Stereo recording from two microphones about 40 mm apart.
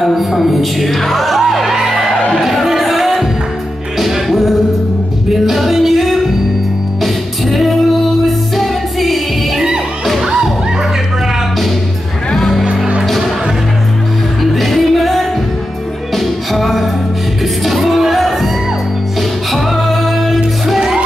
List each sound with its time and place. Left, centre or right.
0.0 s speech: centre
2.4 s music: centre
7.5 s music: centre
12.4 s music: centre
12.6 s music: right
14.4 s music: centre
19.5 s music: centre